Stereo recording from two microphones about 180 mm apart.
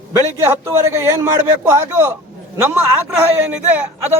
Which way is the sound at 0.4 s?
15° right (ahead or behind).